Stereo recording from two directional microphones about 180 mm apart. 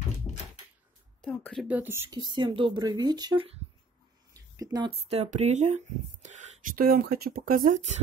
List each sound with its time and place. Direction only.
1.2 s a sound: 5° left (ahead or behind)
1.7 s speech: 10° right (ahead or behind)
2.1 s speech: 25° right (ahead or behind); by 7.9 s 45° right (ahead or behind)